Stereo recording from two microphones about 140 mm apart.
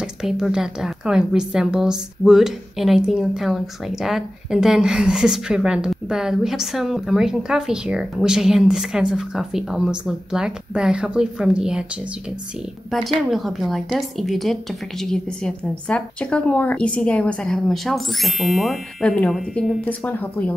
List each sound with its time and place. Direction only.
0.0 s speech: 5° right (ahead or behind)
12.9 s speech: centre (ahead or behind)
19.8 s speech: 10° left (ahead or behind)